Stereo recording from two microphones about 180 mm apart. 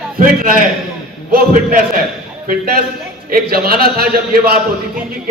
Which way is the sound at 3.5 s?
55° right (ahead or behind).